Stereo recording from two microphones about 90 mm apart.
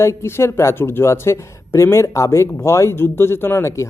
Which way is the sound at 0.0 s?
30° left (ahead or behind).